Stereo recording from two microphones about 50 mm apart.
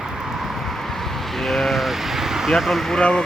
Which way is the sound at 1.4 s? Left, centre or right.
Centre.